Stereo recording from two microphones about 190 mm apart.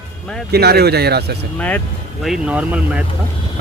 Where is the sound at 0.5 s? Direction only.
55° right (ahead or behind).